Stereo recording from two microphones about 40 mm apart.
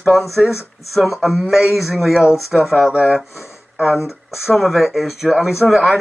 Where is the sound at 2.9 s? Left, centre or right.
Right.